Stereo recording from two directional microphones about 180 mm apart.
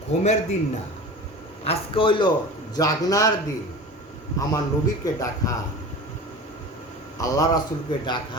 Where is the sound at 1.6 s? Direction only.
30° left (ahead or behind).